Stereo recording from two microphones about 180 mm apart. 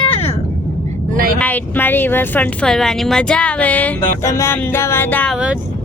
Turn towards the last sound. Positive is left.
turn(degrees=10)  # may be behind; listen again after turning